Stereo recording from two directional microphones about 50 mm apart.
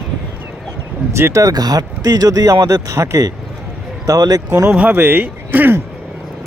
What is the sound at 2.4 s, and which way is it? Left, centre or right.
Speech, right.